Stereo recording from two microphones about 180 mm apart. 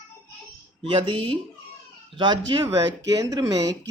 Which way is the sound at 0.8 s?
30° right (ahead or behind).